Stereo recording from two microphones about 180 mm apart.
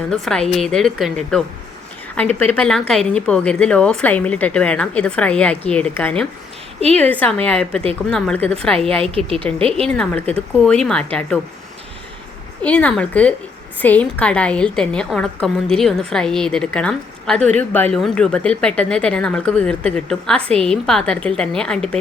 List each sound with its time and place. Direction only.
0.1 s speech: 5° left (ahead or behind)
2.4 s a woman's voice: 5° left (ahead or behind)
9.6 s a woman's voice: 30° right (ahead or behind)
9.8 s a woman's voice: 5° left (ahead or behind)
12.6 s a woman's voice: 5° left (ahead or behind)